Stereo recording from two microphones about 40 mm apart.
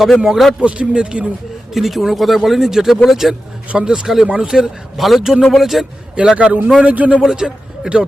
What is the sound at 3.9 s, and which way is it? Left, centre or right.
A man's voice, centre.